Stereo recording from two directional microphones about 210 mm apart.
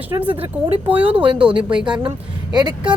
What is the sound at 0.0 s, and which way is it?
Speech, 10° right (ahead or behind).